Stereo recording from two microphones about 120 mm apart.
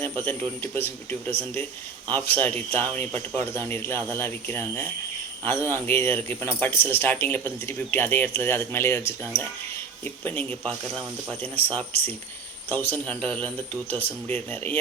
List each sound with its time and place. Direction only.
0.0 s a man's voice: 15° left (ahead or behind)
10.2 s a man's voice: 10° left (ahead or behind)